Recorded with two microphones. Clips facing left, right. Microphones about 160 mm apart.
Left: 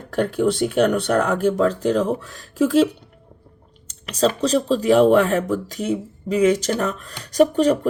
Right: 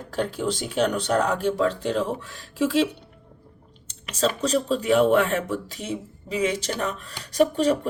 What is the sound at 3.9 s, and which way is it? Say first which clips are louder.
Speech: left 5 dB; 40° left (ahead or behind).